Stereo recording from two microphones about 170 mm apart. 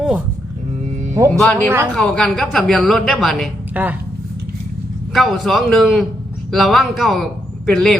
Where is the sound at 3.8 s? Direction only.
10° right (ahead or behind).